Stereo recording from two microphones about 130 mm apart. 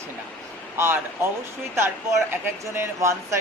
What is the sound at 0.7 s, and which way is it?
Speech, 20° right (ahead or behind).